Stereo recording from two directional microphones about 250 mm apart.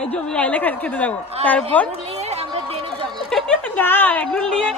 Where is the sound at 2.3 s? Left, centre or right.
Right.